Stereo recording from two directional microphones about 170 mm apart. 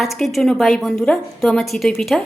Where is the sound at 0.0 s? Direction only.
Centre (ahead or behind).